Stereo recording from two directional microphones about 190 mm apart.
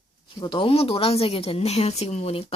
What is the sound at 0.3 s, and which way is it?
A woman's voice, 25° left (ahead or behind).